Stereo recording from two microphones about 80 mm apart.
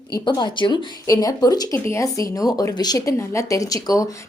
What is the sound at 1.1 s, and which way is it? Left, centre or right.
Speech, left.